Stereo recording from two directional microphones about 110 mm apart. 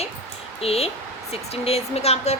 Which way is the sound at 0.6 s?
65° left (ahead or behind).